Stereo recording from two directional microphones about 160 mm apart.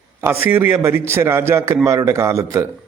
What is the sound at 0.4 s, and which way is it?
A man's voice, 10° right (ahead or behind).